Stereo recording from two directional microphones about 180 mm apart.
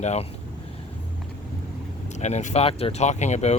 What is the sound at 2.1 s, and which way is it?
Speech, 40° left (ahead or behind).